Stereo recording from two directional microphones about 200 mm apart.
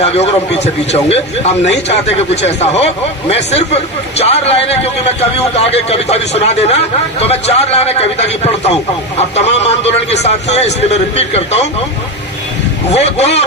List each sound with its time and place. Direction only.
0.0 s a man's voice: 30° left (ahead or behind)
12.9 s a man's voice: 30° left (ahead or behind)